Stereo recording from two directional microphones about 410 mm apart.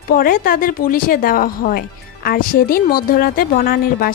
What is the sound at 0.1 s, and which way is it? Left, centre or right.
Speech, left.